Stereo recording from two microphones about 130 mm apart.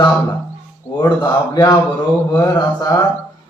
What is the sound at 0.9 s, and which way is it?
A man's voice, 35° left (ahead or behind).